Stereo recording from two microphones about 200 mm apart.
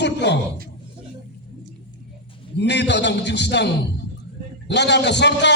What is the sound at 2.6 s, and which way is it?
A man's voice, 60° left (ahead or behind).